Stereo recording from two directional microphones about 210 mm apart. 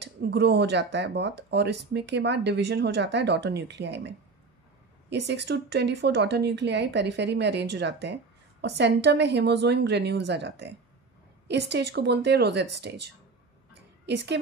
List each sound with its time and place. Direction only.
0.0 s speech: 55° right (ahead or behind)
5.1 s speech: 55° right (ahead or behind)